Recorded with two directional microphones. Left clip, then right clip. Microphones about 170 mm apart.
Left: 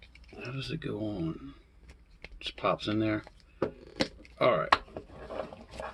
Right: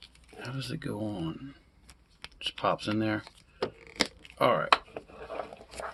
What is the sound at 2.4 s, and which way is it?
Speech, 35° right (ahead or behind).